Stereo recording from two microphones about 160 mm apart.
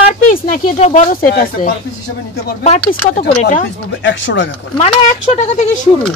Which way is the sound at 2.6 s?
45° left (ahead or behind).